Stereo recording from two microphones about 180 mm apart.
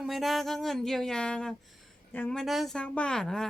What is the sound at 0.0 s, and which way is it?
A woman's voice, centre (ahead or behind).